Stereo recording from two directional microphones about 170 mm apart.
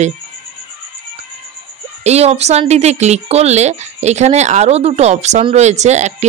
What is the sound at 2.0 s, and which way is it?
Speech, 40° right (ahead or behind).